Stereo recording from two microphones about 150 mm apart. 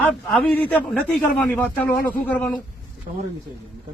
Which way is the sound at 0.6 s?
10° left (ahead or behind).